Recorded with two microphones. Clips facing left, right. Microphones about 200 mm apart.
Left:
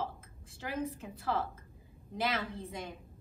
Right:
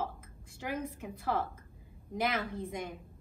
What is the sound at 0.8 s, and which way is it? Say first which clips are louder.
A woman's voice: left 2 dB; 15° right (ahead or behind).